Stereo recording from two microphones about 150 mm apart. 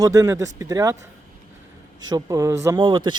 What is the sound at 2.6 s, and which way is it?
Speech, 30° right (ahead or behind).